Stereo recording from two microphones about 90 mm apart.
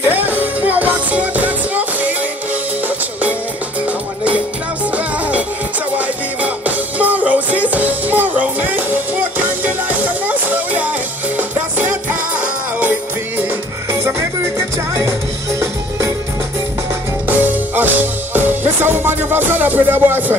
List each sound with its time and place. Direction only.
0.0 s music: 20° right (ahead or behind)
5.9 s music: 15° right (ahead or behind)
17.3 s music: 20° right (ahead or behind)